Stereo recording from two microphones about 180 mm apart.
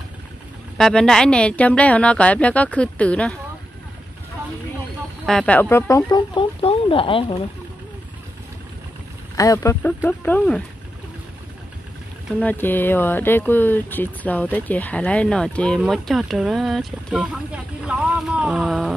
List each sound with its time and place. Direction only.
0.7 s speech: 5° left (ahead or behind)
5.2 s speech: 5° left (ahead or behind); by 7.4 s 30° left (ahead or behind)
9.4 s speech: 20° left (ahead or behind)
12.4 s speech: 10° left (ahead or behind)